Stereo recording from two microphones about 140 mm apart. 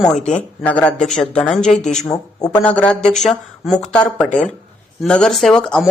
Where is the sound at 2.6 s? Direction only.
10° left (ahead or behind).